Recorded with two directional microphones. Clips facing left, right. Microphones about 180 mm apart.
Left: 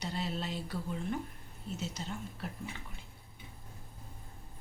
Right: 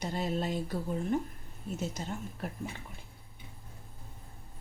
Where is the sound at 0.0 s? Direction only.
50° right (ahead or behind).